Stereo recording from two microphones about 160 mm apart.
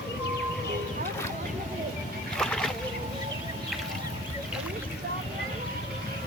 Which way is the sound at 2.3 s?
5° left (ahead or behind).